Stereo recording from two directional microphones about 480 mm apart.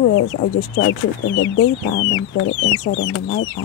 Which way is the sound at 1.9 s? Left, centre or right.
Left.